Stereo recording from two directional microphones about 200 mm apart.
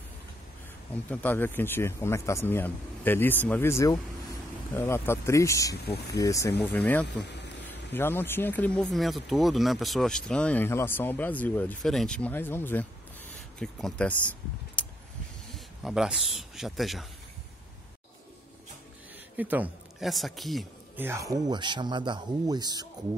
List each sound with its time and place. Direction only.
1.0 s speech: 10° left (ahead or behind)
7.2 s speech: 60° left (ahead or behind)
7.6 s speech: 10° left (ahead or behind)
14.8 s vehicle: 5° left (ahead or behind)
15.5 s speech: centre (ahead or behind)
19.3 s speech: 10° right (ahead or behind)
21.0 s speech: 15° right (ahead or behind)